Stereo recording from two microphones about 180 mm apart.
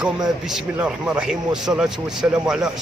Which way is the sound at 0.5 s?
5° right (ahead or behind).